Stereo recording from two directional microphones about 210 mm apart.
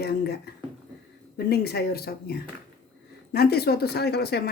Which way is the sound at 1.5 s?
50° left (ahead or behind).